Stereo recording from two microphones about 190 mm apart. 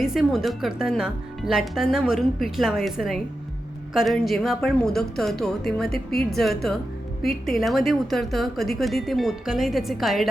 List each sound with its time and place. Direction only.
0.0 s speech: 5° right (ahead or behind)
5.9 s a woman's voice: 55° left (ahead or behind)
6.3 s speech: centre (ahead or behind)